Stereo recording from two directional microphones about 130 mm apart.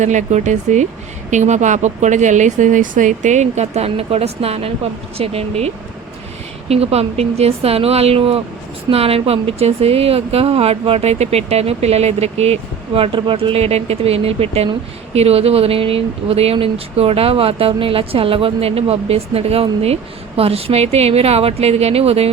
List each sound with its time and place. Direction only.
0.0 s speech: 65° right (ahead or behind); by 22.3 s 50° right (ahead or behind)